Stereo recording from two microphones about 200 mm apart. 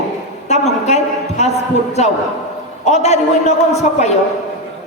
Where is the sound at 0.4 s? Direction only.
35° left (ahead or behind).